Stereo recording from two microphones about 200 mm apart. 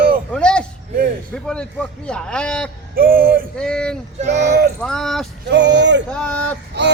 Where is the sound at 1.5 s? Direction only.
5° left (ahead or behind).